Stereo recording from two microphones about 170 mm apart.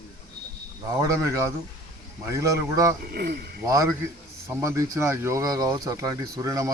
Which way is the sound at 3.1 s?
65° right (ahead or behind).